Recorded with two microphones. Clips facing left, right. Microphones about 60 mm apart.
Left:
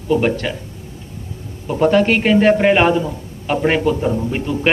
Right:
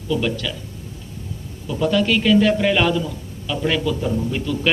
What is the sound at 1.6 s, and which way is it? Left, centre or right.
A man's voice, left.